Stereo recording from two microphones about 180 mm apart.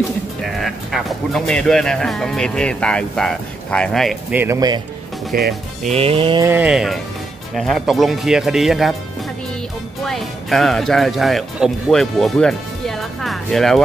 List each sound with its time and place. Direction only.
0.4 s speech: centre (ahead or behind)
4.4 s a man's voice: 20° right (ahead or behind)
5.3 s speech: 55° right (ahead or behind)
5.9 s music: 30° right (ahead or behind)
6.4 s speech: 10° right (ahead or behind)
10.0 s speech: centre (ahead or behind)